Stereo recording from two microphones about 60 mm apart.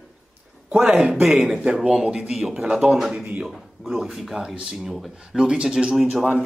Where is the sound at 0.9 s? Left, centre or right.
Centre.